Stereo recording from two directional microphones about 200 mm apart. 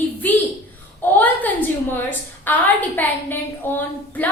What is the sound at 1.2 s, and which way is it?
A woman's voice, 10° left (ahead or behind).